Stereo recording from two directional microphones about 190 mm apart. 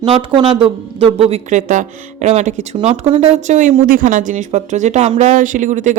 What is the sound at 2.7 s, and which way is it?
Speech, 25° right (ahead or behind).